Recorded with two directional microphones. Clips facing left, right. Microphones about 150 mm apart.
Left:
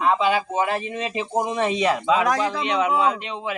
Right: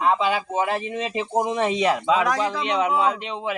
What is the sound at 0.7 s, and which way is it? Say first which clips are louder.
Speech: even; 25° right (ahead or behind).